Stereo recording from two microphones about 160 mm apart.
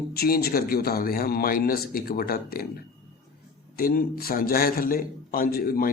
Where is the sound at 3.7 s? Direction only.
65° left (ahead or behind).